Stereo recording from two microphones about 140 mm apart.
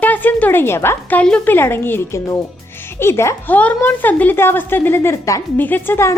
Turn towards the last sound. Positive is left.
turn(degrees=20)  # may be behind; listen again after turning